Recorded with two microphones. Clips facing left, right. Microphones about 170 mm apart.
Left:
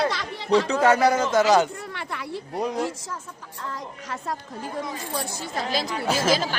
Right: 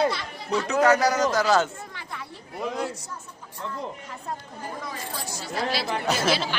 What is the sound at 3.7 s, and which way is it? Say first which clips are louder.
Speech: left 1 dB; 90° left.